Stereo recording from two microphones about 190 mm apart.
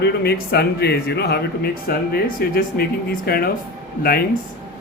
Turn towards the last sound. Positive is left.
turn(degrees=50)  # may be behind; listen again after turning